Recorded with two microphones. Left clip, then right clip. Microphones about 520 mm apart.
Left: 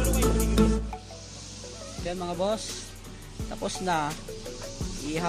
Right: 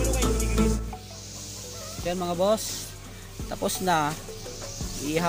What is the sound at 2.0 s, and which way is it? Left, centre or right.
Music, left.